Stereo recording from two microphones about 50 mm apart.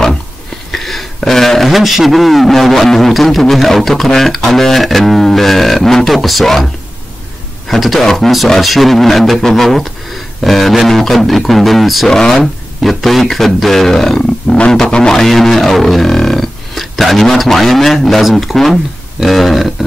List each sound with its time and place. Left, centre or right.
0.7 s a man's voice: centre
14.5 s a sound: centre
14.9 s roaring cats: centre